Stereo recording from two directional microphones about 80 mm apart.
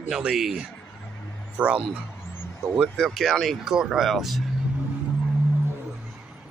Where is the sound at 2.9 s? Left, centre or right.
Centre.